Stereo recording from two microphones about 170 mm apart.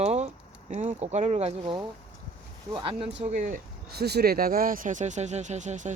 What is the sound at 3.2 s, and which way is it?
Speech, 45° right (ahead or behind).